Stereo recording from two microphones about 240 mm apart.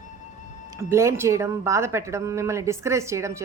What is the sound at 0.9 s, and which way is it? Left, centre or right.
A woman's voice, centre.